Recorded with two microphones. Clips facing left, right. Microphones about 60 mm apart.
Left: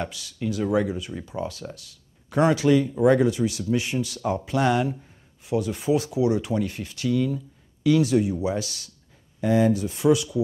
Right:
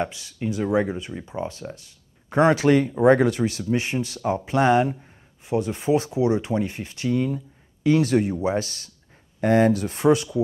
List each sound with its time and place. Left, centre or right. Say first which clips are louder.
0.0 s speech: right 2 dB; right
3.2 s speech: right 1 dB; right
3.6 s speech: right 1 dB; right
9.4 s speech: right 2 dB; right